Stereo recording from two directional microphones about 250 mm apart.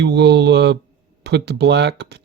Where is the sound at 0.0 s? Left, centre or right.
Right.